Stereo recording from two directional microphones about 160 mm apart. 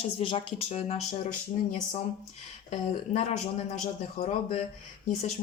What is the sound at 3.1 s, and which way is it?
Speech, 55° left (ahead or behind).